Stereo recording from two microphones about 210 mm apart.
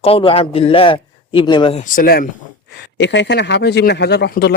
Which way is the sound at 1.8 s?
40° left (ahead or behind).